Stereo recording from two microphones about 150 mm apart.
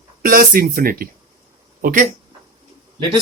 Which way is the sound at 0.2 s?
75° right (ahead or behind).